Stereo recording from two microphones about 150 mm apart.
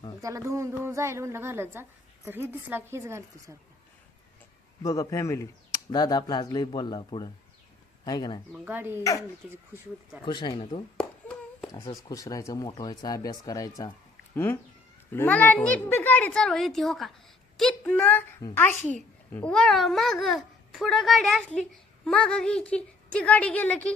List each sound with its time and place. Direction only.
0.2 s a woman's voice: 20° right (ahead or behind)
4.8 s speech: 25° left (ahead or behind)
8.5 s a woman's voice: 10° right (ahead or behind)
9.4 s a child's voice: 5° right (ahead or behind)
10.2 s speech: 30° left (ahead or behind)
10.9 s humming: centre (ahead or behind)
11.7 s a woman's voice: 25° left (ahead or behind); by 23.9 s 10° left (ahead or behind)